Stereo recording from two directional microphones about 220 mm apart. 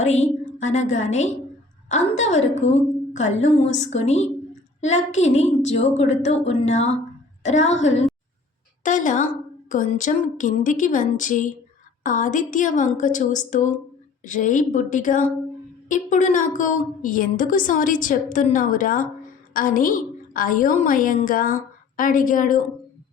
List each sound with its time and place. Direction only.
0.7 s a woman's voice: 35° left (ahead or behind)